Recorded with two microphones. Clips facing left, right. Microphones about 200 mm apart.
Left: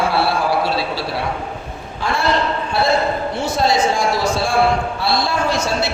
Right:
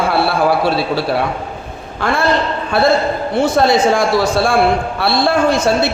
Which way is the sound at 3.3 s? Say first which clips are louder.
Right 8 dB; 55° right (ahead or behind).